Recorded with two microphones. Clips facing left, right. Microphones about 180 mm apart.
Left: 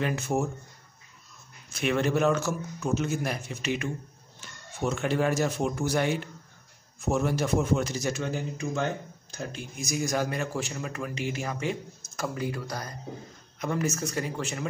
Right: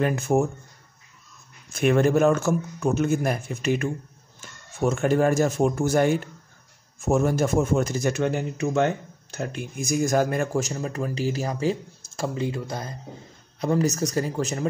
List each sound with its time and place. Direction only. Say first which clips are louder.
0.0 s speech: right 6 dB; 50° right (ahead or behind)
1.7 s speech: right 6 dB; 50° right (ahead or behind)